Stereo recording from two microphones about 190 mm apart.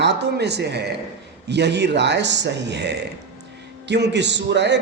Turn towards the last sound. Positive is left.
turn(degrees=-65)  # may be behind; listen again after turning